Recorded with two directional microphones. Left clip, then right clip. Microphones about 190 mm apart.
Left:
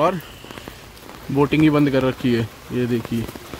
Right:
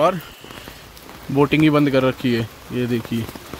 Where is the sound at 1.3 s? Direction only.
10° right (ahead or behind).